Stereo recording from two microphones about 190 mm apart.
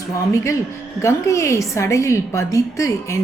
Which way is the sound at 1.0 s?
15° left (ahead or behind).